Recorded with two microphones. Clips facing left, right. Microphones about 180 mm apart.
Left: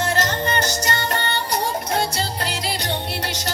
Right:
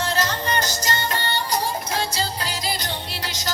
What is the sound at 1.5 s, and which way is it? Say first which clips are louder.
Music: left 4 dB; 60° left (ahead or behind).